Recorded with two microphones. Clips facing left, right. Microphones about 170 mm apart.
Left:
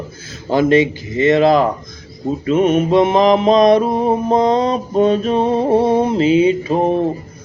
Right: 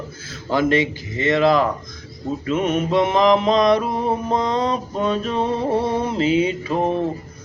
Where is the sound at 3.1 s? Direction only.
25° left (ahead or behind).